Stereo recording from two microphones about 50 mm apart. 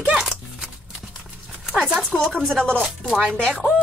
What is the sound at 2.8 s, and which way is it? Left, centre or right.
Speech, right.